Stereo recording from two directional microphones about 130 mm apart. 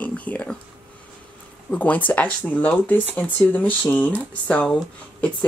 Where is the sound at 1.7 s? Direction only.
10° left (ahead or behind).